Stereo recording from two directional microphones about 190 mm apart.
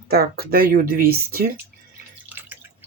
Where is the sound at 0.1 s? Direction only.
55° right (ahead or behind).